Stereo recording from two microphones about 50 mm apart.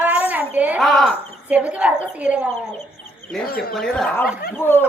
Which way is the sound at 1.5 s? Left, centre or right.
Right.